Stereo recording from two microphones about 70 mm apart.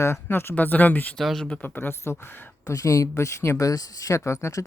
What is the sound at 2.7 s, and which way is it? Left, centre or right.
Speech, left.